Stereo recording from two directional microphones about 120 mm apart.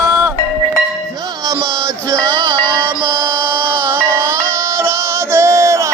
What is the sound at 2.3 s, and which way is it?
Music, 35° right (ahead or behind).